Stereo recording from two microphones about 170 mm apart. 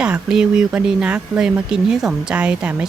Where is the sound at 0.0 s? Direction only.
5° right (ahead or behind).